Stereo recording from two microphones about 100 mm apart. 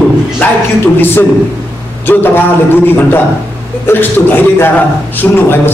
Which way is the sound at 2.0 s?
20° left (ahead or behind).